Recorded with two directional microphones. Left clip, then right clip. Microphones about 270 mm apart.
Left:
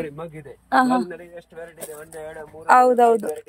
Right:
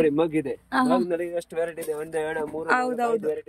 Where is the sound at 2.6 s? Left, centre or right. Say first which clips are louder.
Left 11 dB; centre.